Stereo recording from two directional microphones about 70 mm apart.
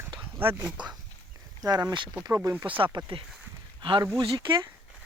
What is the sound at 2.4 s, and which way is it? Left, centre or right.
Speech, right.